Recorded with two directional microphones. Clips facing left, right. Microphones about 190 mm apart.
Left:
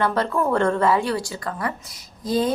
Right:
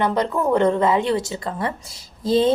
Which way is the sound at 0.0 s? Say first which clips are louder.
Right 1 dB; 20° right (ahead or behind).